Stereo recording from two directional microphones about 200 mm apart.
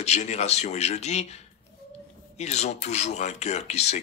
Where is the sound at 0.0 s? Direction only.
35° left (ahead or behind).